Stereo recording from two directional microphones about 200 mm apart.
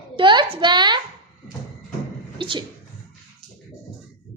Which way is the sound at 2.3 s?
25° right (ahead or behind).